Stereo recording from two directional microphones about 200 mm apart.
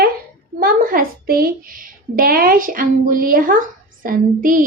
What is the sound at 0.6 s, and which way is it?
A woman's voice, 45° right (ahead or behind).